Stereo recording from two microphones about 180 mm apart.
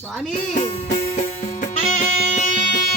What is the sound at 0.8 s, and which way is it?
Music, 40° left (ahead or behind).